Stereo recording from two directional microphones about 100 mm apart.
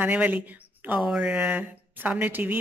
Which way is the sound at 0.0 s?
15° right (ahead or behind).